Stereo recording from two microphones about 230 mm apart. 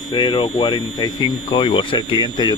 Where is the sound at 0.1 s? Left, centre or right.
Left.